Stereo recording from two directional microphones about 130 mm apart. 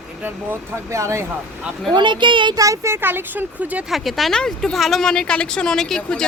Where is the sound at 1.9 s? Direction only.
35° right (ahead or behind); by 3.9 s 10° right (ahead or behind).